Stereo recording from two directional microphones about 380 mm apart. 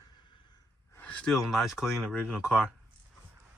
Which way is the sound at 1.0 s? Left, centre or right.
Centre.